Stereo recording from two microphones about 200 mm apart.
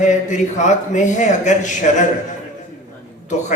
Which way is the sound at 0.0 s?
40° left (ahead or behind).